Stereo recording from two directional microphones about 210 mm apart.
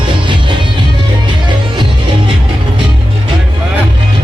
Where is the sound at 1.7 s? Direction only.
25° right (ahead or behind).